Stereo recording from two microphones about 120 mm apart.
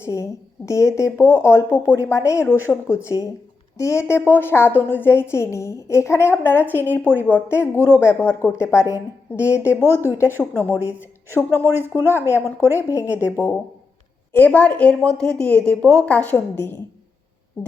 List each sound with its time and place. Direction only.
0.0 s a woman's voice: 25° left (ahead or behind)